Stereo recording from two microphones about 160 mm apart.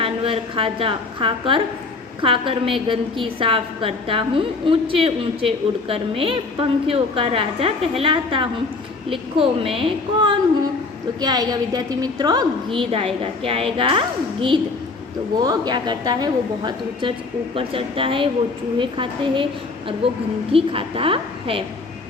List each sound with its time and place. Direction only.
0.0 s a woman's voice: 35° right (ahead or behind)
12.9 s a woman's voice: 35° right (ahead or behind)
15.4 s a woman's voice: 25° right (ahead or behind)
20.5 s a woman's voice: 35° right (ahead or behind)